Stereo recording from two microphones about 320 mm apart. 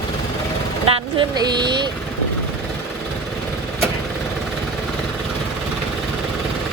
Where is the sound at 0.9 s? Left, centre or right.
Centre.